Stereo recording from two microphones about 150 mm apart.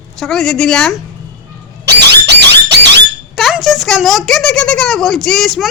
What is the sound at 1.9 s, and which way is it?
Squeal, 90° right.